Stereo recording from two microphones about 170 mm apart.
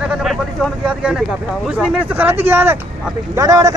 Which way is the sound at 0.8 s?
5° right (ahead or behind).